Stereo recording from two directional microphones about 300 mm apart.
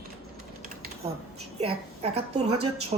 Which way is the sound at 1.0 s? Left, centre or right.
Centre.